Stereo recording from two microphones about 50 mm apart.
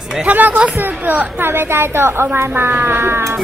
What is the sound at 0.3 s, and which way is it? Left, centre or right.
Speech, right.